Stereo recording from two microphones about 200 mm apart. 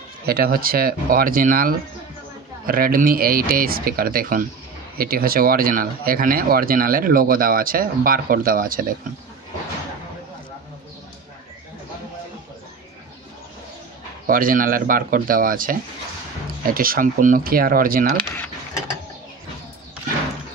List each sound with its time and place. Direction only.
0.3 s speech: 45° right (ahead or behind)
14.2 s speech: 45° right (ahead or behind)